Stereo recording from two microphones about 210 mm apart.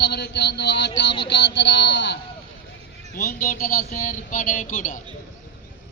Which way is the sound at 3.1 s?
40° left (ahead or behind).